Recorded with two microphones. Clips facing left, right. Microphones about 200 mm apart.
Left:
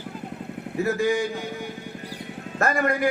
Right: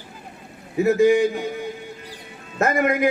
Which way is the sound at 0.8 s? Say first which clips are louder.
Right 7 dB; 20° right (ahead or behind).